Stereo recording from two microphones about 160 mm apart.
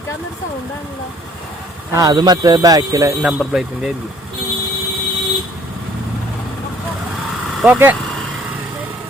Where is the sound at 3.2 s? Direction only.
5° right (ahead or behind).